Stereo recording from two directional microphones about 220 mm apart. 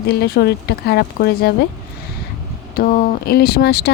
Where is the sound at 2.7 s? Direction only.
45° left (ahead or behind).